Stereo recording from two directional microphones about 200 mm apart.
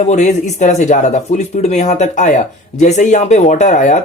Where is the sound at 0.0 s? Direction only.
35° left (ahead or behind).